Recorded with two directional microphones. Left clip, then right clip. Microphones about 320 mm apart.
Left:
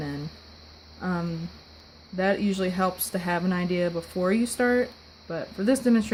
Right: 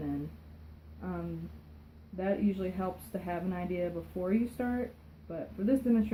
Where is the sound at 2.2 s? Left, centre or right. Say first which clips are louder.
Left 8 dB; left.